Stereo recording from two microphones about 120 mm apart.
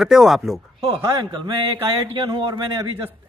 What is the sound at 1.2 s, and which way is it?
A man's voice, 45° right (ahead or behind).